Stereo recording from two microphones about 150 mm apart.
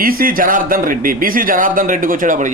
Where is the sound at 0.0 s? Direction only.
75° right (ahead or behind).